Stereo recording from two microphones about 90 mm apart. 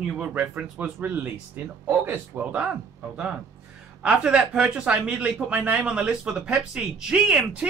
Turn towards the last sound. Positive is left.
turn(degrees=-10)  # may be behind; listen again after turning